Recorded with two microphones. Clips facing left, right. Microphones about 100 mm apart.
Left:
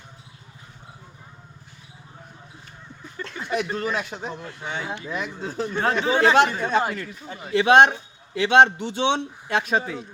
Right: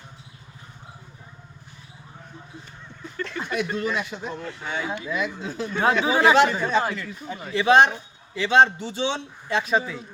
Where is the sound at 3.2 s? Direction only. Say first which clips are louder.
Right 4 dB; 15° left (ahead or behind).